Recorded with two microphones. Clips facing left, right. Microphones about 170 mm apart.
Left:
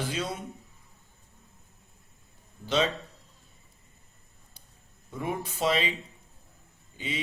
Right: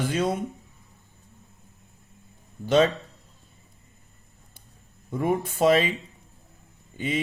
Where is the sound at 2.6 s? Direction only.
50° right (ahead or behind).